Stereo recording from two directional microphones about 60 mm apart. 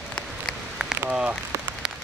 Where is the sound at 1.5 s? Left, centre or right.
Right.